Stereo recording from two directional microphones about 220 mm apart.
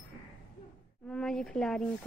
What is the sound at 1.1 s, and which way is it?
Speech, centre (ahead or behind).